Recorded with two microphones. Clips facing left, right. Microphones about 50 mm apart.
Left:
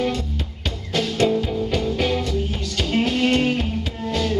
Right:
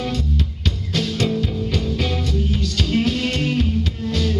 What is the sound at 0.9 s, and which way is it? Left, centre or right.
Music, centre.